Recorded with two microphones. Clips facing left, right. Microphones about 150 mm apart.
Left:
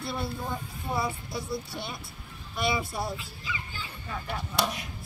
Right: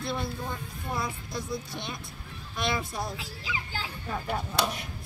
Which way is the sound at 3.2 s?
90° right.